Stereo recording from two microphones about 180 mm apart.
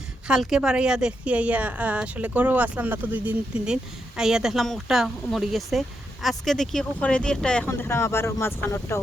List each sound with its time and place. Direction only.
0.3 s a woman's voice: 5° right (ahead or behind); by 9.0 s 15° left (ahead or behind)